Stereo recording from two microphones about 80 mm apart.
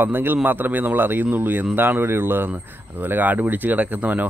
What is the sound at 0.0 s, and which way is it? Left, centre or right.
Speech, right.